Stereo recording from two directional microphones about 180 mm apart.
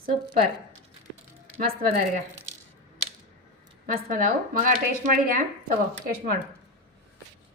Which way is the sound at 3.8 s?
50° right (ahead or behind).